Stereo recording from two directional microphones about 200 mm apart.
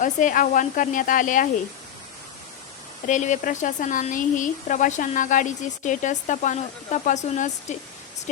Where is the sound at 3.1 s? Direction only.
40° left (ahead or behind).